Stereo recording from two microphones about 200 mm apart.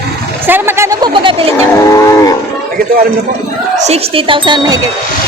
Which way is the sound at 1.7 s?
15° left (ahead or behind).